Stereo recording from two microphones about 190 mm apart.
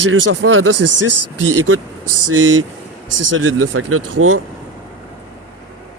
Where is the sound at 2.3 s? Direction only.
90° right.